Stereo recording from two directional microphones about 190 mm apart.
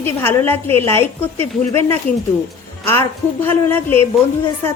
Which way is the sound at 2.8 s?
10° left (ahead or behind).